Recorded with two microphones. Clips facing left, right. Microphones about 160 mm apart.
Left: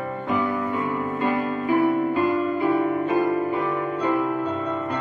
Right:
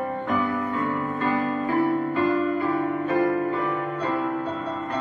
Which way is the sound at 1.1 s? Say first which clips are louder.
Even; 15° left (ahead or behind).